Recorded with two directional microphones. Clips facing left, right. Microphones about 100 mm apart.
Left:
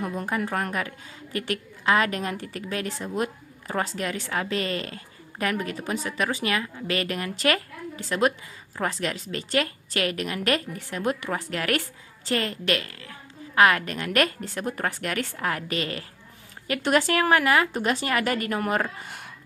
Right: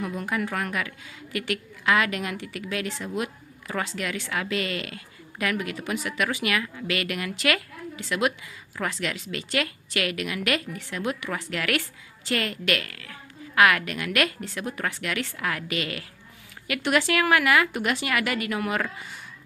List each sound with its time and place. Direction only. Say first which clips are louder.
0.2 s a woman's voice: left 2 dB; 35° left (ahead or behind)